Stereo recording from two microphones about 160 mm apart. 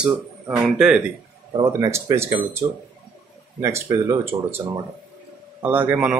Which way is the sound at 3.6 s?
20° right (ahead or behind).